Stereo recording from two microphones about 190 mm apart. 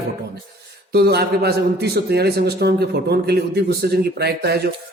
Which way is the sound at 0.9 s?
60° right (ahead or behind).